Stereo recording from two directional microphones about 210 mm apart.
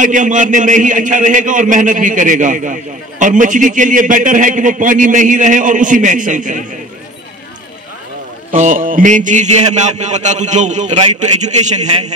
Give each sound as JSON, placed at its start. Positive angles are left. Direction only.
{"t": 0.0, "sound": "a man's voice", "side_deg": -35}
{"t": 8.5, "sound": "a man's voice", "side_deg": -35}